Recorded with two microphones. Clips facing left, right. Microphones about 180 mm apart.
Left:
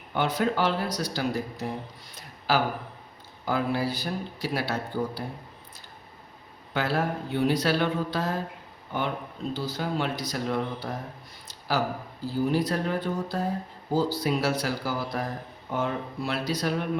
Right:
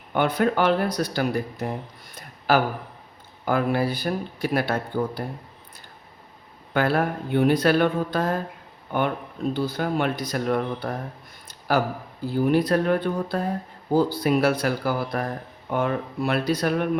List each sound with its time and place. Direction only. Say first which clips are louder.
0.1 s speech: right 4 dB; 55° right (ahead or behind)
6.7 s speech: right 5 dB; 55° right (ahead or behind)
12.2 s speech: right 5 dB; 60° right (ahead or behind)